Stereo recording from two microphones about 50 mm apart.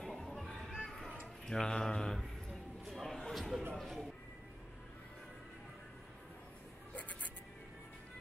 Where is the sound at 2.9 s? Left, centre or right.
Centre.